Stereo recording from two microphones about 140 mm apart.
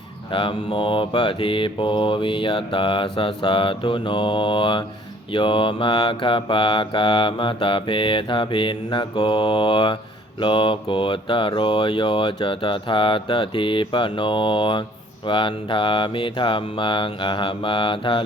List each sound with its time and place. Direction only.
0.3 s mantra: 35° left (ahead or behind)